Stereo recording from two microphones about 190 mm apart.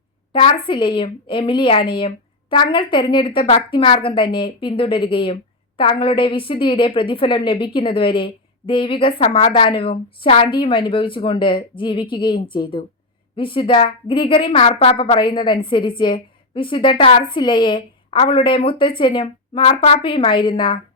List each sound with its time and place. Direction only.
0.3 s a woman's voice: 25° left (ahead or behind)